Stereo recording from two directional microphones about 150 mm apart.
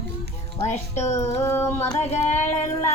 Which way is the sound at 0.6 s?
50° left (ahead or behind).